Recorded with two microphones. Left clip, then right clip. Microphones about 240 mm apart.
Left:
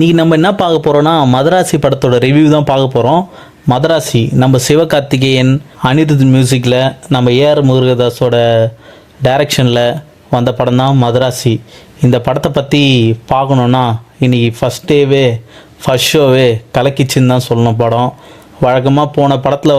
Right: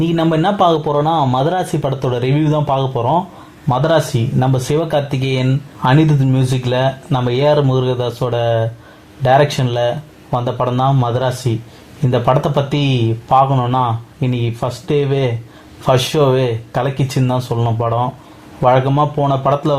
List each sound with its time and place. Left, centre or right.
0.0 s speech: left